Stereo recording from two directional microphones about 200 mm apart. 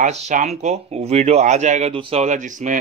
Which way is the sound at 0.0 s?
35° right (ahead or behind).